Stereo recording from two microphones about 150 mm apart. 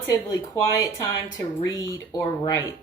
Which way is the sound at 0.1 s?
20° left (ahead or behind).